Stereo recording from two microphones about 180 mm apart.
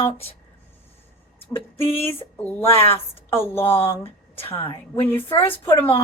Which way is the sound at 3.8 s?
30° left (ahead or behind).